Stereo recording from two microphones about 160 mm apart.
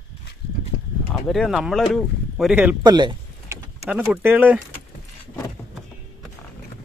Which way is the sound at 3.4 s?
15° right (ahead or behind).